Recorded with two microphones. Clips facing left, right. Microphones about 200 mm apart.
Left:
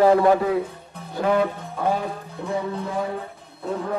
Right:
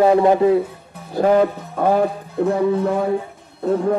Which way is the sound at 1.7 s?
55° right (ahead or behind).